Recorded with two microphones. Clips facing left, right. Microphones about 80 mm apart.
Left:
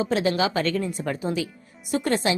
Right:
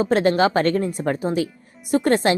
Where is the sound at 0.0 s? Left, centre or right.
Right.